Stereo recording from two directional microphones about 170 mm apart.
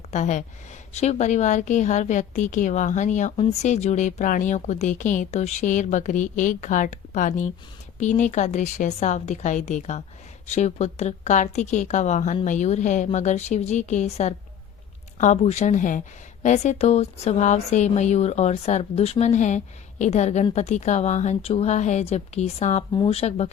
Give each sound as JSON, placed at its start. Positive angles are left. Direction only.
{"t": 0.1, "sound": "a woman's voice", "side_deg": 45}